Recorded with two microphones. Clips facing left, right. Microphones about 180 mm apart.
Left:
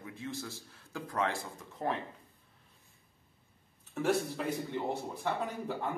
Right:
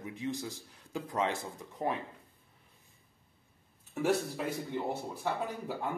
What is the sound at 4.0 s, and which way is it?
Speech, 10° right (ahead or behind).